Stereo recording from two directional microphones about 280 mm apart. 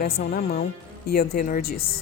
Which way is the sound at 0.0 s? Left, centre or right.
Left.